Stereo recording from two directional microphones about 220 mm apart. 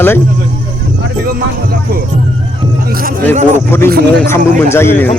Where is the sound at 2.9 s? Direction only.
40° right (ahead or behind).